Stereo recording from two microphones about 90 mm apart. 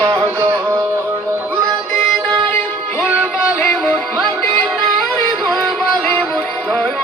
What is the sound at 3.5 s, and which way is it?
Music, 20° left (ahead or behind).